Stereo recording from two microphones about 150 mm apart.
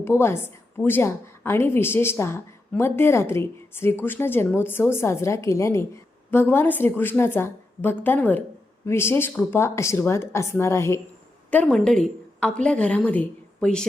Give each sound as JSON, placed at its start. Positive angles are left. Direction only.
{"t": 0.0, "sound": "a woman's voice", "side_deg": 15}
{"t": 11.5, "sound": "a woman's voice", "side_deg": 5}